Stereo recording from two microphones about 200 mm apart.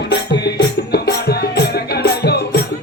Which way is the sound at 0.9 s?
50° left (ahead or behind).